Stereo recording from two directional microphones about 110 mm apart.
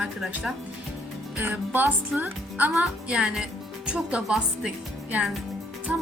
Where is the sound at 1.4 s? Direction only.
15° right (ahead or behind).